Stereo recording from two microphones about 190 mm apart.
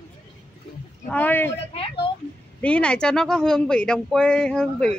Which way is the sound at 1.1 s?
10° left (ahead or behind).